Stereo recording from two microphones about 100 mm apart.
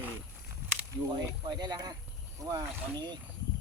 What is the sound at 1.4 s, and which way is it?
Speech, 45° right (ahead or behind).